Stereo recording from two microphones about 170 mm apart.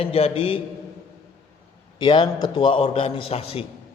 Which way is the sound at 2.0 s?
30° left (ahead or behind).